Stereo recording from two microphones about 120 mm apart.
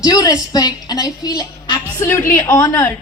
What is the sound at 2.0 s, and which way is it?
Speech, 25° left (ahead or behind).